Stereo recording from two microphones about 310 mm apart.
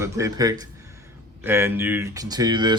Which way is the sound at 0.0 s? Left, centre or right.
Centre.